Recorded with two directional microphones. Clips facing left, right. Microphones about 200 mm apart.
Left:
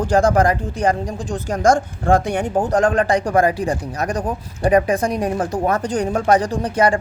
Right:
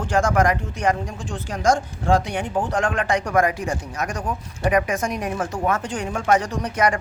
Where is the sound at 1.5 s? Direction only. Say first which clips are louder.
Left 4 dB; 50° left (ahead or behind).